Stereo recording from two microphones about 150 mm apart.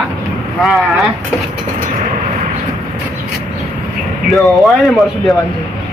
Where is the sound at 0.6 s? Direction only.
Centre (ahead or behind).